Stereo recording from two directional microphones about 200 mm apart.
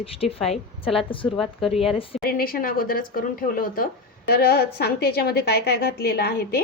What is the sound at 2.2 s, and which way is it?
Speech, 45° left (ahead or behind).